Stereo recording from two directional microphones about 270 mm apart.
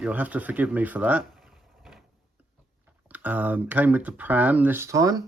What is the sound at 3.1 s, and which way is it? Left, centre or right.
Speech, centre.